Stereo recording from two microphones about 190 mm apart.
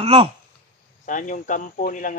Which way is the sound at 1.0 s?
40° left (ahead or behind).